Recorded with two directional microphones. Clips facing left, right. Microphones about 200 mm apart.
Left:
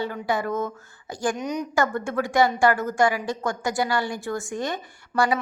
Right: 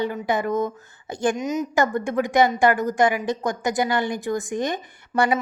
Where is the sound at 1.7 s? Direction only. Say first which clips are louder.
Right 2 dB; 20° right (ahead or behind).